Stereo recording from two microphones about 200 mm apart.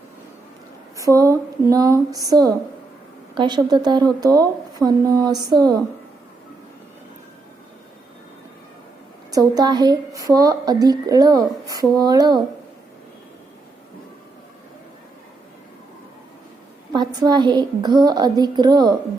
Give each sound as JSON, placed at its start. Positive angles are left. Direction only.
{"t": 0.9, "sound": "speech", "side_deg": -15}
{"t": 9.3, "sound": "speech", "side_deg": -20}
{"t": 16.9, "sound": "speech", "side_deg": -20}